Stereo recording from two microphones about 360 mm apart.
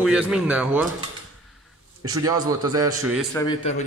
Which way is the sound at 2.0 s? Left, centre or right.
Centre.